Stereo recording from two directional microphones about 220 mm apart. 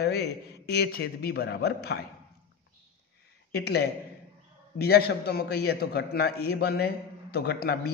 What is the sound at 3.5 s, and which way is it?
A man's voice, 45° left (ahead or behind).